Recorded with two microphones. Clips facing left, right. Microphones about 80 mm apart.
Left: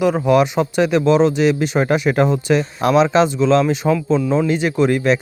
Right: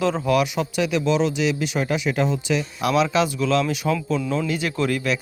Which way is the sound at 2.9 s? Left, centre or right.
Left.